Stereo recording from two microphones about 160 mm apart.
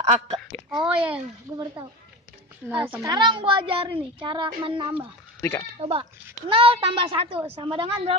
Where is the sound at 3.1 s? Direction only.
30° right (ahead or behind).